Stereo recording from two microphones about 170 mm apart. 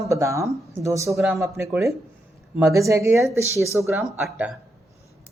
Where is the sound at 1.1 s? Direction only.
Centre (ahead or behind).